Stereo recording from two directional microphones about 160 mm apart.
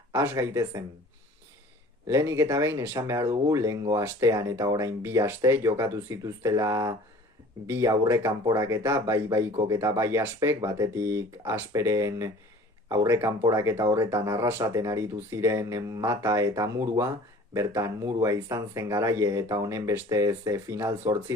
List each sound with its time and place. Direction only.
0.1 s speech: 20° right (ahead or behind)
2.0 s speech: 15° right (ahead or behind)